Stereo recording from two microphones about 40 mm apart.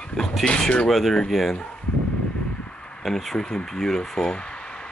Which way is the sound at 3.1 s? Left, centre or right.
Centre.